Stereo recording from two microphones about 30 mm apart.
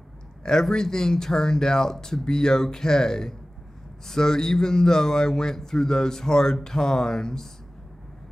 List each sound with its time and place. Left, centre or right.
0.4 s speech: centre